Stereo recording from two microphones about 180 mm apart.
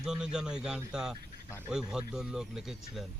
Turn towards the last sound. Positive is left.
turn(degrees=0)  # may be behind; listen again after turning